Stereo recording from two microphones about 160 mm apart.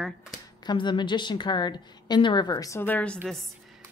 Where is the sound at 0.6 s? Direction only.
30° left (ahead or behind); by 3.2 s 10° left (ahead or behind).